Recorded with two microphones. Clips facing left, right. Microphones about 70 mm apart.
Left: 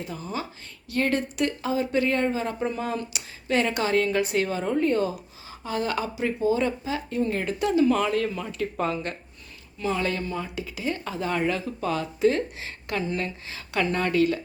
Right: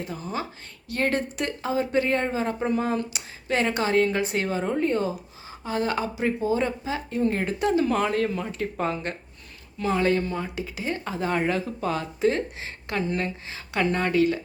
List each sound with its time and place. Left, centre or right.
0.0 s speech: right
9.7 s speech: right
10.0 s speech: right